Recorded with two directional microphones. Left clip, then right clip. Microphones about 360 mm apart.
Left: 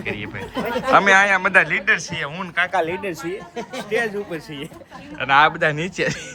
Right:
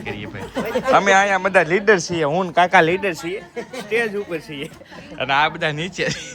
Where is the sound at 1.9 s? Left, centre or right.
Right.